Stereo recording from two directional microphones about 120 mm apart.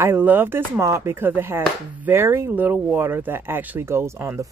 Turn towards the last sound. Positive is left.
turn(degrees=-20)  # may be behind; listen again after turning